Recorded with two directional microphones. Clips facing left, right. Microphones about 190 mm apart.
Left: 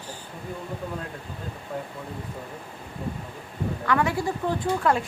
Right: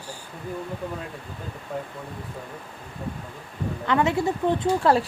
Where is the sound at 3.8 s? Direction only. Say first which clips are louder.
Right 3 dB; 20° right (ahead or behind).